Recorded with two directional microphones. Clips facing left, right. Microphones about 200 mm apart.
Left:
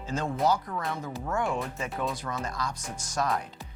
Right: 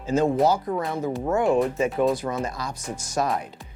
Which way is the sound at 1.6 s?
15° right (ahead or behind).